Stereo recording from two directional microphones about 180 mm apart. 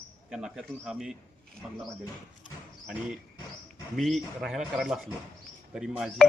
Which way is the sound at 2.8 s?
5° right (ahead or behind).